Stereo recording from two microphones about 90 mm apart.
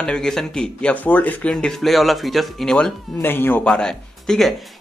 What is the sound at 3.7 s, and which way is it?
Speech, 5° left (ahead or behind).